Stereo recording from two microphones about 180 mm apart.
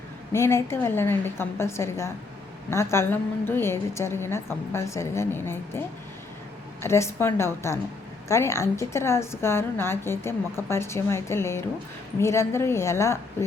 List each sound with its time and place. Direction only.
0.3 s a woman's voice: 15° left (ahead or behind)
6.8 s a woman's voice: 15° left (ahead or behind)